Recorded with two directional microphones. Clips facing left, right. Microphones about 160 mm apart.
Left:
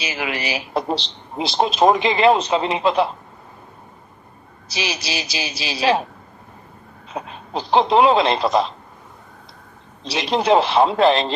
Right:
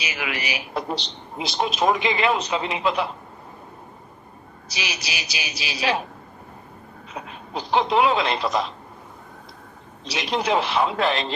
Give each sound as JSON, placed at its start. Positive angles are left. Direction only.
{"t": 0.0, "sound": "a man's voice", "side_deg": 30}
{"t": 4.7, "sound": "a man's voice", "side_deg": 30}
{"t": 7.1, "sound": "speech", "side_deg": 30}
{"t": 10.0, "sound": "a man's voice", "side_deg": 30}